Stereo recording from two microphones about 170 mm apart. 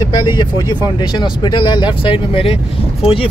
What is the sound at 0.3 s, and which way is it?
Speech, 25° left (ahead or behind).